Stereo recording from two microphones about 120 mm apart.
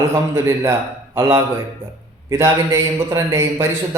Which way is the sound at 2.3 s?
20° right (ahead or behind).